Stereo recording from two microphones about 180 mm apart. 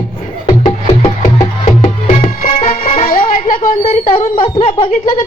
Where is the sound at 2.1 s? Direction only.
45° left (ahead or behind).